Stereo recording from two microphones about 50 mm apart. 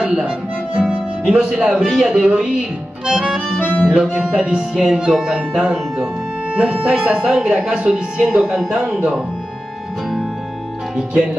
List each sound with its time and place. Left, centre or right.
0.0 s speech: right
0.7 s music: centre
1.6 s speech: centre